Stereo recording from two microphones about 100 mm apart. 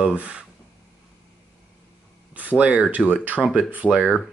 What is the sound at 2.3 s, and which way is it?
Speech, 15° right (ahead or behind).